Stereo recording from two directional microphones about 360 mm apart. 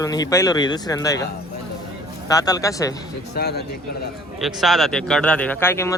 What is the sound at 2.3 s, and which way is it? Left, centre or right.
Speech, centre.